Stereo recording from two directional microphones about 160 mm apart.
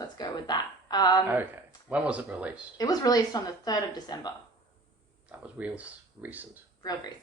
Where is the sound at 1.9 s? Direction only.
10° right (ahead or behind).